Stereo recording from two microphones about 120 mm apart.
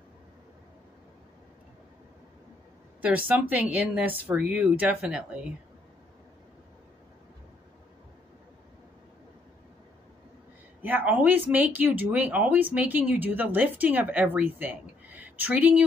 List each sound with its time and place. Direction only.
3.0 s speech: 15° right (ahead or behind)
10.8 s speech: 15° right (ahead or behind)